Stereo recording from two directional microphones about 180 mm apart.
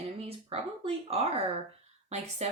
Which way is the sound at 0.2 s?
35° right (ahead or behind).